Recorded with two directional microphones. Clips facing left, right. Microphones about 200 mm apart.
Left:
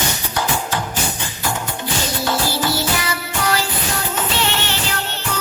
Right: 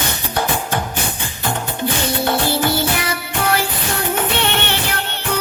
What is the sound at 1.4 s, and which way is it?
Music, 55° right (ahead or behind).